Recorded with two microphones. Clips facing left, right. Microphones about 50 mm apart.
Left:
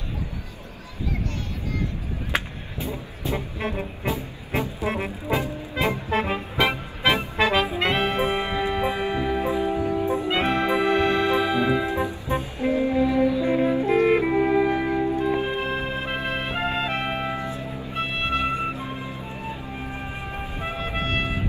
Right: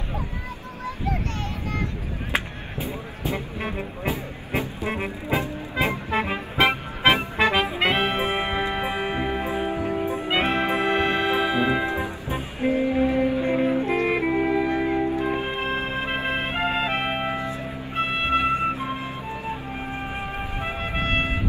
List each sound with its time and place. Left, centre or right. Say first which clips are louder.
2.3 s music: right 1 dB; right
4.8 s music: left 1 dB; centre
5.3 s music: even; right
6.2 s music: left 1 dB; right
6.6 s music: right 3 dB; right
10.1 s brass instrument: even; right
12.4 s music: right 1 dB; right
14.2 s music: left 1 dB; centre
14.8 s music: even; right
17.9 s music: right 3 dB; right
18.4 s music: right 3 dB; right
19.9 s music: right 3 dB; right